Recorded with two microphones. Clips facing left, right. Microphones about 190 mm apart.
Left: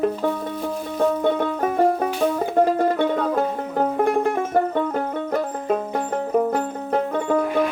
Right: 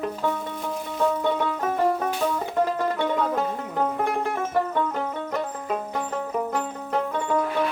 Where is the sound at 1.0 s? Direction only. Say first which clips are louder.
Left 4 dB; 50° left (ahead or behind).